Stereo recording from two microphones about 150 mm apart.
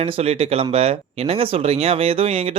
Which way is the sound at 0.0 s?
40° right (ahead or behind).